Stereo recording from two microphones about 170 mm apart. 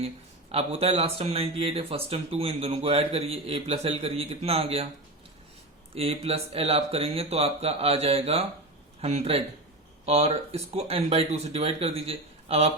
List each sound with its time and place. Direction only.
0.5 s speech: 35° right (ahead or behind)
5.9 s speech: 35° right (ahead or behind)